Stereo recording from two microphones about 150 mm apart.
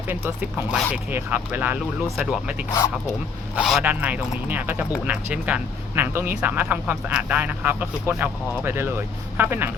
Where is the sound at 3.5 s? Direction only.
5° right (ahead or behind).